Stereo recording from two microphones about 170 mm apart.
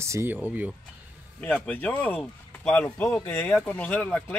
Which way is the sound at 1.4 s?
10° left (ahead or behind).